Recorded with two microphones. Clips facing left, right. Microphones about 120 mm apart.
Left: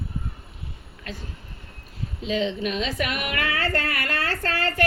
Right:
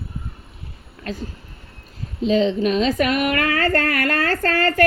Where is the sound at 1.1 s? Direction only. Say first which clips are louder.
Right 8 dB; 35° right (ahead or behind).